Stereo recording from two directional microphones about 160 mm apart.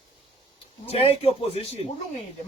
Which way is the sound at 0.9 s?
40° left (ahead or behind).